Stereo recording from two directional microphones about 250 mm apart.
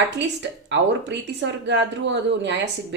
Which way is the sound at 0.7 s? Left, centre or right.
Right.